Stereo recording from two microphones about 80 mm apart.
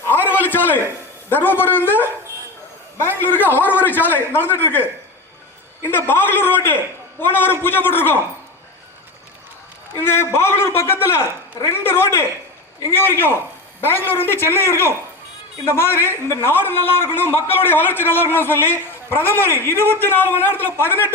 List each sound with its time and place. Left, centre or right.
0.0 s a sound: left
1.3 s a man's voice: left
3.2 s a man's voice: left
10.1 s a man's voice: left